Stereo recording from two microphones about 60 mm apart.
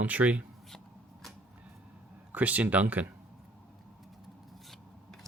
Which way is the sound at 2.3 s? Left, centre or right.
Right.